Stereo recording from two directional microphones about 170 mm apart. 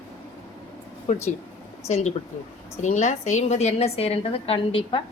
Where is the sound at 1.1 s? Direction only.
45° left (ahead or behind); by 5.0 s 30° left (ahead or behind).